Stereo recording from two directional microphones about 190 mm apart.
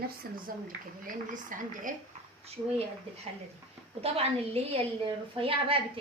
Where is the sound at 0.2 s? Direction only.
50° right (ahead or behind).